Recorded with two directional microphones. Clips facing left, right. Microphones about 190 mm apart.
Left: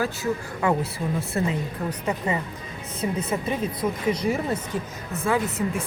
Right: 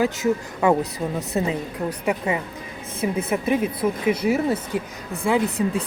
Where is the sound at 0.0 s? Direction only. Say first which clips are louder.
Right 5 dB; 20° right (ahead or behind).